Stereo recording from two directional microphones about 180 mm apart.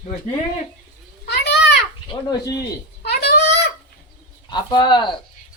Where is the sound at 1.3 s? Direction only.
70° left (ahead or behind).